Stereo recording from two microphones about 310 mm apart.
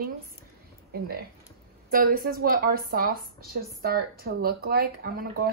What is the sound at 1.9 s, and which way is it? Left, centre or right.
A woman's voice, right.